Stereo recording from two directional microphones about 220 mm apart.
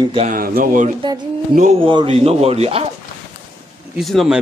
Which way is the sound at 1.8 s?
25° right (ahead or behind).